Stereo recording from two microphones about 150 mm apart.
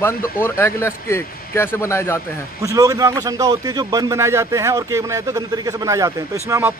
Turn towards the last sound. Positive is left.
turn(degrees=-20)  # may be behind; listen again after turning